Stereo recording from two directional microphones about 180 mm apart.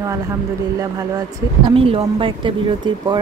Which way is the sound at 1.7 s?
30° right (ahead or behind).